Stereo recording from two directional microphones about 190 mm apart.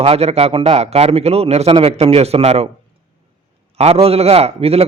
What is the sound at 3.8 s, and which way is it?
A man's voice, 30° right (ahead or behind).